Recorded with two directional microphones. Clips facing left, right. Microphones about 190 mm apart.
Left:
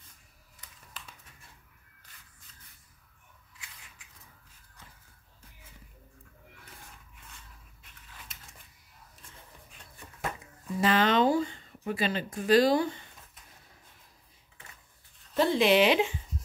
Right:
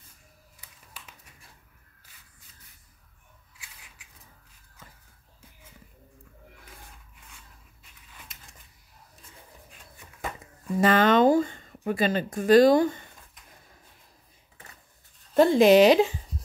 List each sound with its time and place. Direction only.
1.0 s a sound: 10° right (ahead or behind)
10.8 s speech: 50° right (ahead or behind)
15.3 s speech: 45° right (ahead or behind)